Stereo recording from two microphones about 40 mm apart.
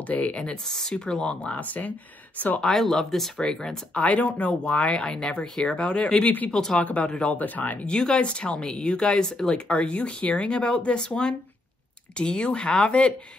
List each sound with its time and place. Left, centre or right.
0.3 s speech: left
0.7 s speech: centre
0.9 s speech: left
2.6 s speech: centre
3.3 s speech: centre
3.9 s speech: left
7.8 s speech: left